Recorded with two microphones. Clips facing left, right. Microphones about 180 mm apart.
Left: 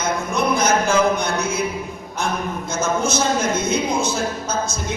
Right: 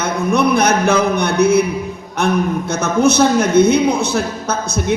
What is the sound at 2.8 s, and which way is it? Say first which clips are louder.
A man's voice: right 7 dB; 65° right (ahead or behind).